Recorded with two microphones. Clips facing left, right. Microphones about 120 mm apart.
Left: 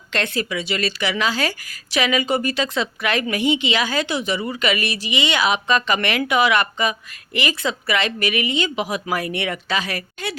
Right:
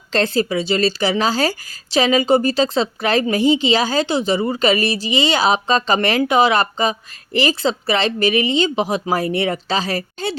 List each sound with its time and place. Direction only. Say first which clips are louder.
0.1 s a woman's voice: right 6 dB; 30° right (ahead or behind)